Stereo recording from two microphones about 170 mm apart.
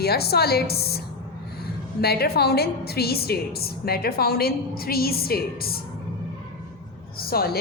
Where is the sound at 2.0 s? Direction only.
70° left (ahead or behind).